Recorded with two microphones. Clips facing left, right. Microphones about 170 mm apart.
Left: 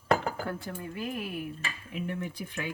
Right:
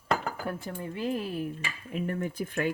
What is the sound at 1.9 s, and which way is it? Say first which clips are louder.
Speech: right 4 dB; 45° right (ahead or behind).